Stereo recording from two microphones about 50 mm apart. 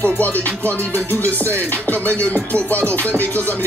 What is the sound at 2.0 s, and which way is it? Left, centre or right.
Music, left.